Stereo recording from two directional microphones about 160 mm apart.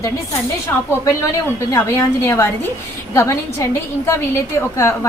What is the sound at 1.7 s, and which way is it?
A woman's voice, 15° left (ahead or behind).